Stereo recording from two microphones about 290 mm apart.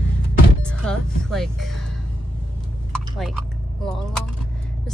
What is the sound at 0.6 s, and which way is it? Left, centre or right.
Speech, centre.